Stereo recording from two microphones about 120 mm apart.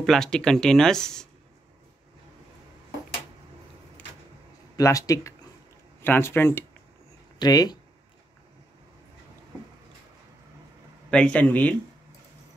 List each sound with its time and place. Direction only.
0.0 s speech: 5° left (ahead or behind)
4.7 s speech: 30° left (ahead or behind)
6.0 s speech: 15° left (ahead or behind)
7.3 s speech: 35° left (ahead or behind)
11.1 s speech: 10° left (ahead or behind)